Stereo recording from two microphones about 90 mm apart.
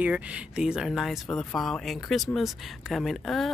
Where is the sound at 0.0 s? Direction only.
15° right (ahead or behind).